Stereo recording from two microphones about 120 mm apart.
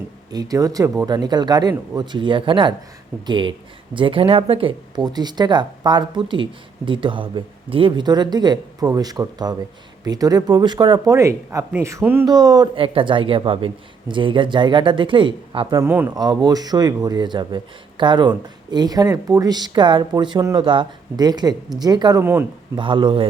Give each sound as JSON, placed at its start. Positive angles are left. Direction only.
{"t": 0.3, "sound": "a man's voice", "side_deg": -30}
{"t": 4.9, "sound": "a man's voice", "side_deg": -35}
{"t": 12.7, "sound": "speech", "side_deg": -50}
{"t": 15.7, "sound": "speech", "side_deg": -20}
{"t": 16.1, "sound": "a man's voice", "side_deg": -35}
{"t": 22.2, "sound": "speech", "side_deg": -20}
{"t": 22.7, "sound": "speech", "side_deg": -45}